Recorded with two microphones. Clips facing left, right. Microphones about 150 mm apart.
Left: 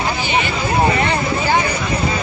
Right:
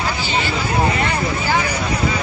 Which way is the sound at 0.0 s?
20° left (ahead or behind).